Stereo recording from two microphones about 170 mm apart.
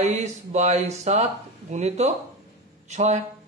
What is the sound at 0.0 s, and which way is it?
Speech, 40° right (ahead or behind).